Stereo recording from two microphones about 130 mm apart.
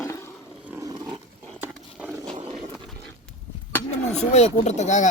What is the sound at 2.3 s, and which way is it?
Wild animals, 55° right (ahead or behind).